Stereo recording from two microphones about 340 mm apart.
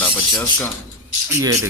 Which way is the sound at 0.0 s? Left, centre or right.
Centre.